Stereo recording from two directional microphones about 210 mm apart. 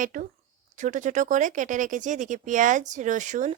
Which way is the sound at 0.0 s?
40° right (ahead or behind).